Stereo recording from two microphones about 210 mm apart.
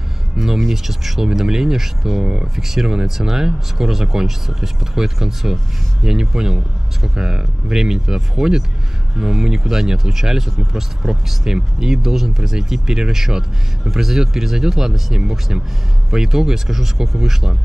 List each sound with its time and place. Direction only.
0.4 s speech: centre (ahead or behind)